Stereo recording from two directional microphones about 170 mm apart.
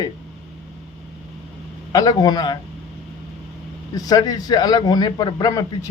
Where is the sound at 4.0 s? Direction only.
20° left (ahead or behind).